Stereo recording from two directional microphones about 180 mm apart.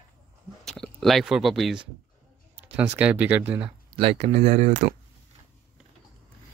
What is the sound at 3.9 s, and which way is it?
Speech, 30° right (ahead or behind).